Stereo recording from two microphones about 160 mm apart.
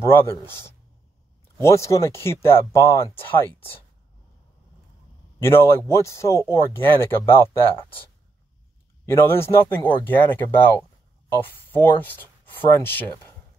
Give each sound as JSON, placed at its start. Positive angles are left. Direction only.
{"t": 0.0, "sound": "a man's voice", "side_deg": 15}
{"t": 1.6, "sound": "a man's voice", "side_deg": 20}
{"t": 5.4, "sound": "a man's voice", "side_deg": 15}
{"t": 9.0, "sound": "a man's voice", "side_deg": 15}